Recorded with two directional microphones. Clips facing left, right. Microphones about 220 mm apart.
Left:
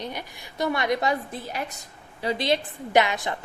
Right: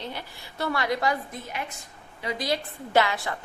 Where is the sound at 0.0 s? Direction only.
15° left (ahead or behind).